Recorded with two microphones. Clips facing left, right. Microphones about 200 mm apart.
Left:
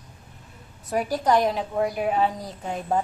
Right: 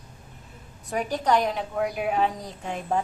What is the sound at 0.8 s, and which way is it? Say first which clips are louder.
A woman's voice: left 2 dB; 5° left (ahead or behind).